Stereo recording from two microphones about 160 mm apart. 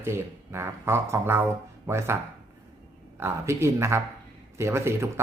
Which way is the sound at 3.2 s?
15° right (ahead or behind).